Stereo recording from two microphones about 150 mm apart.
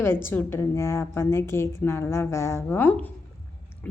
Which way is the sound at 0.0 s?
15° left (ahead or behind).